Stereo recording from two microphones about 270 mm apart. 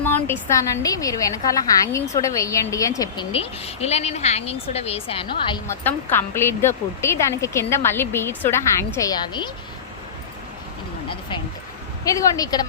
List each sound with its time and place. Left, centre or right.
0.0 s a woman's voice: centre
12.0 s a woman's voice: centre